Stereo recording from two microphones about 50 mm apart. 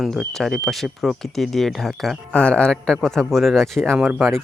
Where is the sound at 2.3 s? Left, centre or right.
Left.